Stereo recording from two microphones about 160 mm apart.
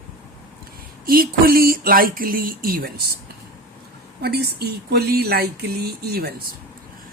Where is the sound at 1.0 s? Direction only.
65° right (ahead or behind).